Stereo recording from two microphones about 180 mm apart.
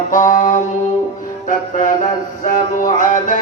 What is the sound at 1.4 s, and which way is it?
Music, 45° left (ahead or behind).